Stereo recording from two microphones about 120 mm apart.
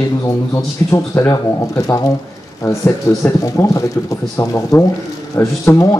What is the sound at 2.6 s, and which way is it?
Speech, 25° left (ahead or behind).